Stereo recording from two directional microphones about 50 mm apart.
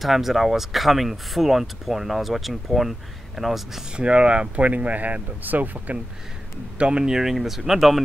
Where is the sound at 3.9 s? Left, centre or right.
Right.